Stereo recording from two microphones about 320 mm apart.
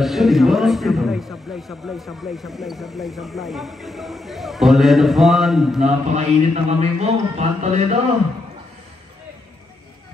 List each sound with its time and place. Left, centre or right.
0.0 s a man's voice: centre
5.9 s a man's voice: centre